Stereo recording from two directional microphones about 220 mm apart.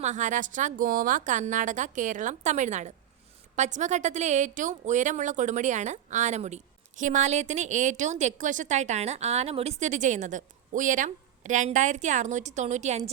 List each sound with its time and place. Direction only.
0.0 s a woman's voice: 35° right (ahead or behind)